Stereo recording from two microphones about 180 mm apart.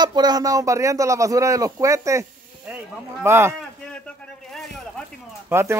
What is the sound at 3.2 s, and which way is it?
Speech, 15° right (ahead or behind).